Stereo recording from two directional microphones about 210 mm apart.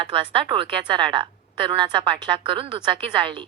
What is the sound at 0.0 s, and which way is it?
A woman's voice, 25° right (ahead or behind).